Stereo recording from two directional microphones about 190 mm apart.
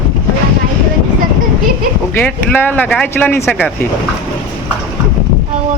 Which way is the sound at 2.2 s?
10° left (ahead or behind).